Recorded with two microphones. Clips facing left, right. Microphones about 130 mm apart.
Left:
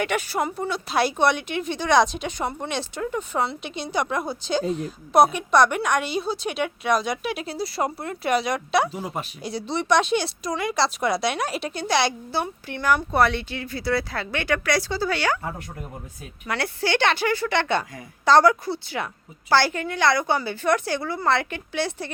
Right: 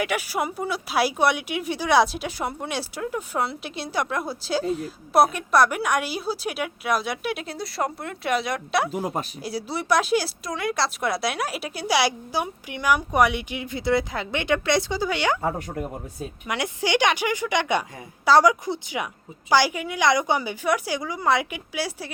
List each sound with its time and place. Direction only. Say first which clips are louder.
0.0 s speech: left 1 dB; 5° right (ahead or behind)
8.9 s speech: right 3 dB; 45° right (ahead or behind)
9.4 s speech: left 2 dB; 5° right (ahead or behind)
16.5 s speech: even; 15° right (ahead or behind)